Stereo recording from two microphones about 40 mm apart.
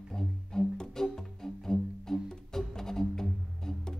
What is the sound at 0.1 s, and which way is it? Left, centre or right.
Music, centre.